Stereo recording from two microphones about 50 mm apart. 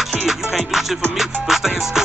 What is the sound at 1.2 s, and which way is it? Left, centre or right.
Music, centre.